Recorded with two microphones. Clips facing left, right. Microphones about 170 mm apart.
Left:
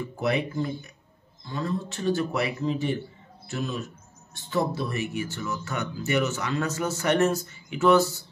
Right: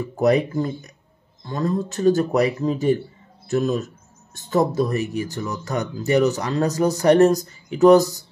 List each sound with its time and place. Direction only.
0.2 s speech: 40° right (ahead or behind)